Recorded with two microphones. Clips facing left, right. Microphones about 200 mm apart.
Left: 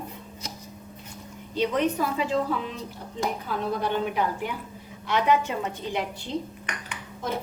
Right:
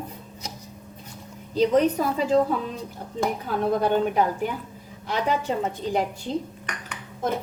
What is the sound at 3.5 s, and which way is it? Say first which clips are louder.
A woman's voice: right 7 dB; 45° right (ahead or behind).